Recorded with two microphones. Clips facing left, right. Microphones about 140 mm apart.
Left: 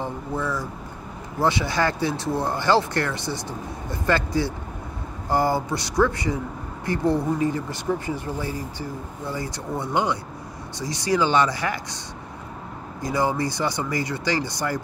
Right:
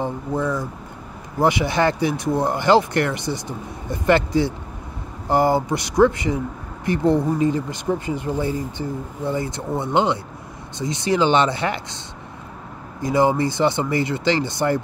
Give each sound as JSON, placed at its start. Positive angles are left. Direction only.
{"t": 0.0, "sound": "speech", "side_deg": -20}
{"t": 13.0, "sound": "speech", "side_deg": -20}